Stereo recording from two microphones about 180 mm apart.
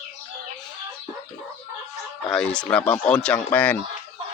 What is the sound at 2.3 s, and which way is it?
Speech, 5° left (ahead or behind).